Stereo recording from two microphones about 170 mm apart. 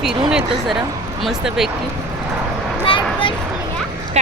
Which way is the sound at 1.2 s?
5° right (ahead or behind).